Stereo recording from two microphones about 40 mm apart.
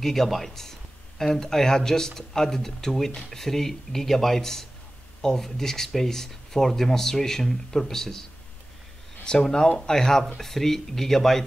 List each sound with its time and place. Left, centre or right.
0.0 s speech: centre